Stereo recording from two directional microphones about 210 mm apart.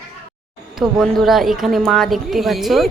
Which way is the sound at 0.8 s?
Centre (ahead or behind).